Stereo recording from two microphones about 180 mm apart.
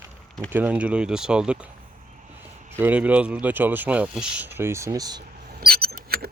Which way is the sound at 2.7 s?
10° right (ahead or behind).